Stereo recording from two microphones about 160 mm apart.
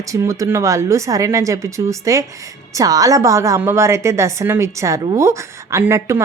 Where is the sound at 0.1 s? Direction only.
20° right (ahead or behind).